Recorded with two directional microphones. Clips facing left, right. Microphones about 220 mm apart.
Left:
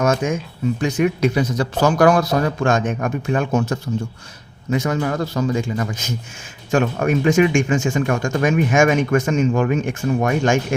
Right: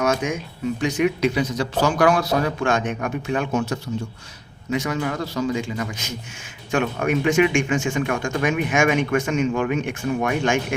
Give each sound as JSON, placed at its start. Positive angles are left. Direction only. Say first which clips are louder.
{"t": 0.0, "sound": "speech", "louder": "left 3 dB", "side_deg": 45}